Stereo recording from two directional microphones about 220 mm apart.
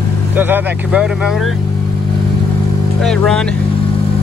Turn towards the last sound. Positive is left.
turn(degrees=0)  # may be behind; listen again after turning